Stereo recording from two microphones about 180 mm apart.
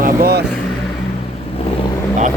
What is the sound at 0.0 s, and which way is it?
Vehicle, 60° right (ahead or behind).